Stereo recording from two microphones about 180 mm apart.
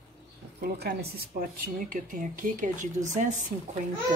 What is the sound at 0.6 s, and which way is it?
Speech, 60° right (ahead or behind).